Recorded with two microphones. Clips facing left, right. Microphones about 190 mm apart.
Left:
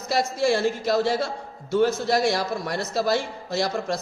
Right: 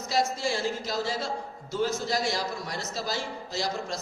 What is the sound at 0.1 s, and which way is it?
A man's voice, 60° left (ahead or behind).